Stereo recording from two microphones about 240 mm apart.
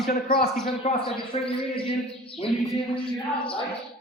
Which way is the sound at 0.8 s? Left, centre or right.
Left.